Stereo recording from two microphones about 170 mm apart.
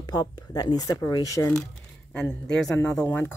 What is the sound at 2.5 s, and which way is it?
Speech, 5° left (ahead or behind).